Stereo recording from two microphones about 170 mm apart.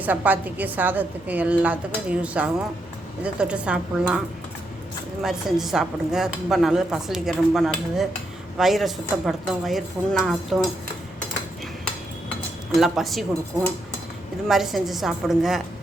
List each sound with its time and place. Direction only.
0.0 s a woman's voice: 10° right (ahead or behind)
5.2 s speech: centre (ahead or behind)
12.7 s speech: centre (ahead or behind)
14.4 s speech: centre (ahead or behind)